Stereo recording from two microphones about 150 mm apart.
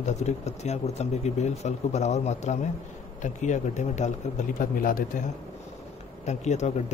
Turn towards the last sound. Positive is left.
turn(degrees=50)  # may be behind; listen again after turning